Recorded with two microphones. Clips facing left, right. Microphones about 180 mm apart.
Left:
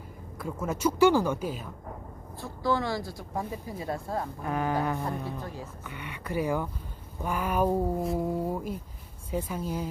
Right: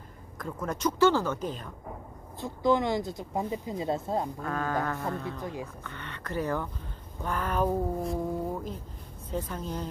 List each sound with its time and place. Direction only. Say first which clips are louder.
0.4 s speech: left 2 dB; 10° left (ahead or behind)
2.4 s speech: right 3 dB; 20° right (ahead or behind)
4.4 s speech: left 2 dB; 15° left (ahead or behind)
5.4 s speech: right 3 dB; 15° right (ahead or behind)
5.9 s speech: left 2 dB; 10° left (ahead or behind)